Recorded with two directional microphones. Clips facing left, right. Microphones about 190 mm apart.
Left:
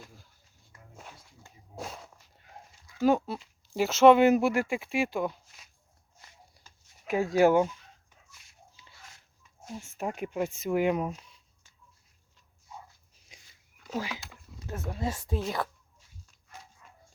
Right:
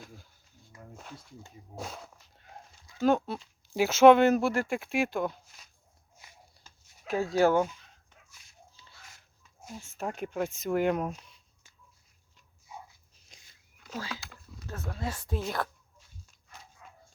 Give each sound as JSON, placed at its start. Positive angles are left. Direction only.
{"t": 0.0, "sound": "a sound", "side_deg": 0}
{"t": 1.7, "sound": "speech", "side_deg": 0}
{"t": 4.2, "sound": "speech", "side_deg": 10}
{"t": 7.1, "sound": "speech", "side_deg": 15}
{"t": 10.0, "sound": "speech", "side_deg": 10}
{"t": 13.2, "sound": "a sound", "side_deg": 10}
{"t": 15.3, "sound": "speech", "side_deg": 0}